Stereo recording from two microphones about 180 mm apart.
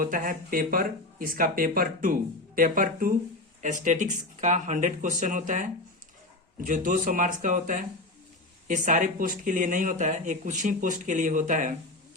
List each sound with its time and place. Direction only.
0.0 s speech: 50° right (ahead or behind)